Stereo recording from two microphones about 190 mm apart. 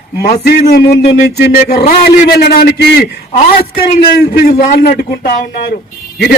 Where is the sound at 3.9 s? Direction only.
50° left (ahead or behind).